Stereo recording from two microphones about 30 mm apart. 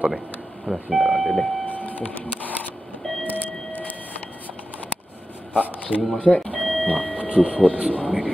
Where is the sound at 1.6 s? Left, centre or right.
Left.